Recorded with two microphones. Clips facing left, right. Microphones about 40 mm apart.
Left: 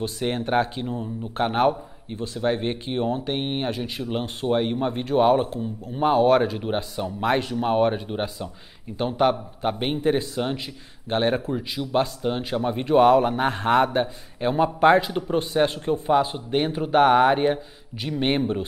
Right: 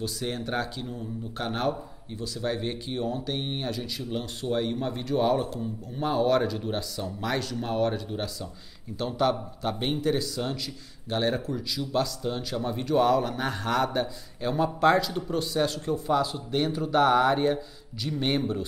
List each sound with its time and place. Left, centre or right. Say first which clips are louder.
0.0 s speech: left 5 dB; left